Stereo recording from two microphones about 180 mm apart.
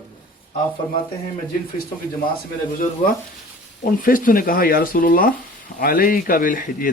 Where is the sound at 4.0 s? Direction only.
50° left (ahead or behind).